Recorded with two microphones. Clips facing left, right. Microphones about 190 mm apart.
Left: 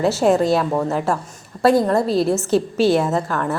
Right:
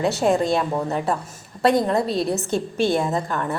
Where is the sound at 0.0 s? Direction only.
Centre (ahead or behind).